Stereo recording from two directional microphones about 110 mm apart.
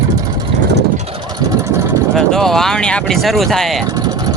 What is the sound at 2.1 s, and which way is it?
Speech, 5° left (ahead or behind).